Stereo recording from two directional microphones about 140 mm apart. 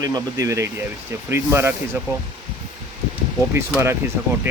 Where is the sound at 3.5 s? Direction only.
20° right (ahead or behind).